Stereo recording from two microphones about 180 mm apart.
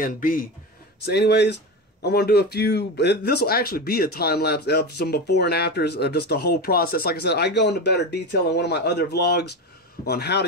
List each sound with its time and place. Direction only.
0.0 s speech: 50° left (ahead or behind)
1.0 s speech: 70° left (ahead or behind)